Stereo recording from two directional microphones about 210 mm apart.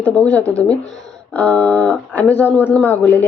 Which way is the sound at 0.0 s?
5° left (ahead or behind).